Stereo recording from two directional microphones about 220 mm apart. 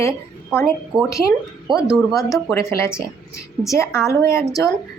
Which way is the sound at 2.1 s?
15° left (ahead or behind).